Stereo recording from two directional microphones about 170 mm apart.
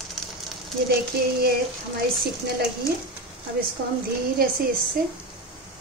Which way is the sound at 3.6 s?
60° right (ahead or behind).